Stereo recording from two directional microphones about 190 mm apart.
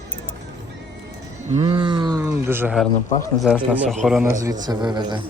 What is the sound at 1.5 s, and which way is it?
Speech, 25° right (ahead or behind).